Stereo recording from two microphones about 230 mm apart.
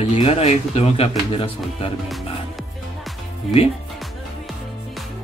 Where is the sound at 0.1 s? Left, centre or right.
Left.